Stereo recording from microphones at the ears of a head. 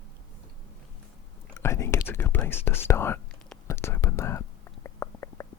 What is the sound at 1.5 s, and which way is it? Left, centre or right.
Speech, left.